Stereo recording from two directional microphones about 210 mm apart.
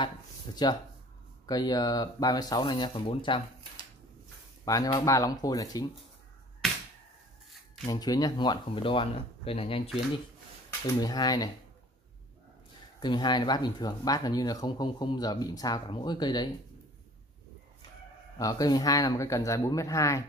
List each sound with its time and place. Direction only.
0.6 s speech: 20° left (ahead or behind)
6.6 s a sound: centre (ahead or behind)
7.8 s speech: 20° left (ahead or behind)
11.0 s speech: 20° left (ahead or behind)
13.0 s speech: 20° left (ahead or behind)
18.4 s speech: 15° left (ahead or behind)